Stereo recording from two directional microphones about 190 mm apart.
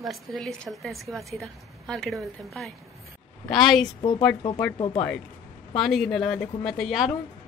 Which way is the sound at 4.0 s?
25° left (ahead or behind).